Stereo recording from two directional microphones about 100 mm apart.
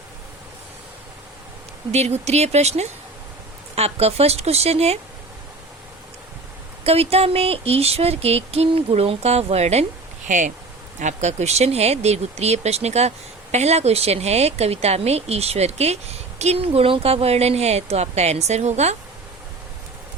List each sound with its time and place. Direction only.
1.9 s speech: 90° right
6.8 s speech: 85° right
11.3 s speech: 90° right